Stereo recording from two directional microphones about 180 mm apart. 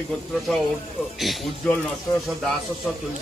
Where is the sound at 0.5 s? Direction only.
Centre (ahead or behind).